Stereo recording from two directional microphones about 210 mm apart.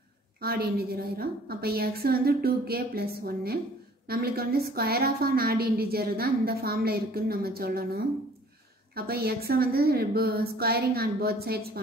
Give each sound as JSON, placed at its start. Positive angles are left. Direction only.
{"t": 0.4, "sound": "a woman's voice", "side_deg": -45}